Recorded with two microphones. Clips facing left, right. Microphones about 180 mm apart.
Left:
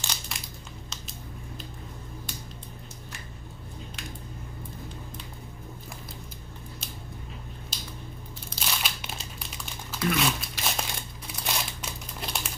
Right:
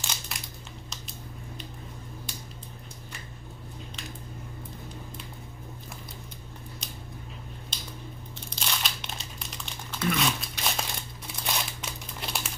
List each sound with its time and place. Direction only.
0.0 s crumpling: centre (ahead or behind)
7.7 s squish: 5° left (ahead or behind)
8.5 s crumpling: 5° left (ahead or behind)